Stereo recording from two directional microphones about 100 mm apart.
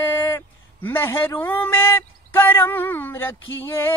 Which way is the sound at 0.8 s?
20° left (ahead or behind).